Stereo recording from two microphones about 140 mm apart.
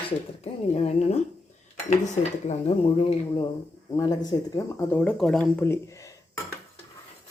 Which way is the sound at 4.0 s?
25° left (ahead or behind).